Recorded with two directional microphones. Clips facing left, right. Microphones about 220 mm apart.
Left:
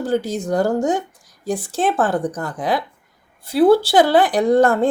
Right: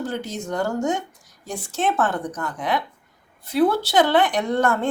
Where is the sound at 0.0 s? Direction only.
35° left (ahead or behind).